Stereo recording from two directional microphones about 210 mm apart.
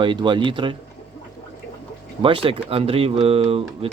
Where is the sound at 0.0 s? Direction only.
20° right (ahead or behind).